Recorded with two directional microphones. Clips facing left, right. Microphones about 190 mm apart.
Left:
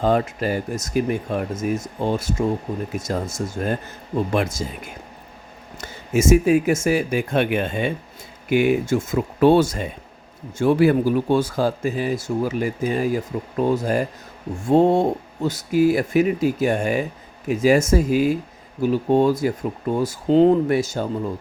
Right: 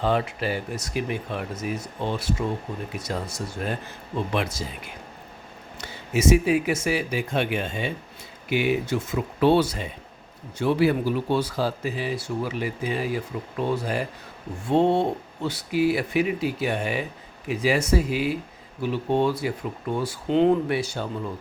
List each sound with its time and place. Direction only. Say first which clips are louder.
0.0 s speech: left 4 dB; 45° left (ahead or behind)